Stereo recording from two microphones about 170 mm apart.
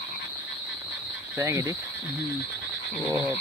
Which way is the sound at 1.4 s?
20° right (ahead or behind).